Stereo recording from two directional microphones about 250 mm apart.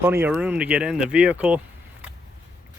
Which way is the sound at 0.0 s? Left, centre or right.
Centre.